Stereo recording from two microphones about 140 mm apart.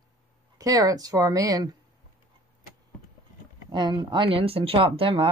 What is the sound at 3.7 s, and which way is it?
Speech, 35° right (ahead or behind).